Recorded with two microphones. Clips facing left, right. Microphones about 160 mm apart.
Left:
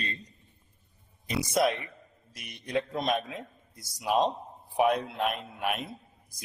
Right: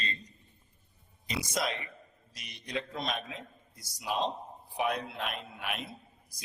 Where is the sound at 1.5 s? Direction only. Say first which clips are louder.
Left 9 dB; 60° left (ahead or behind).